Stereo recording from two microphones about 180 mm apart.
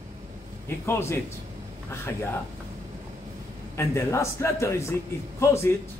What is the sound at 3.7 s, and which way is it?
A man's voice, 15° left (ahead or behind).